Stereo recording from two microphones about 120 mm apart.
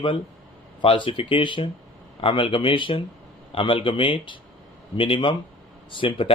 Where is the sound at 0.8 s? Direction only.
45° left (ahead or behind).